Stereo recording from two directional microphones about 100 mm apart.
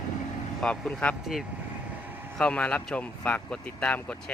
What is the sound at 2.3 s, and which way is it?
Speech, 10° left (ahead or behind).